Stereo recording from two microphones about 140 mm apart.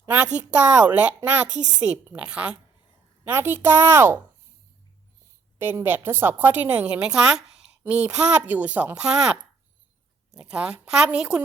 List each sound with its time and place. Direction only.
0.0 s a woman's voice: 10° right (ahead or behind)
5.5 s a woman's voice: 15° right (ahead or behind)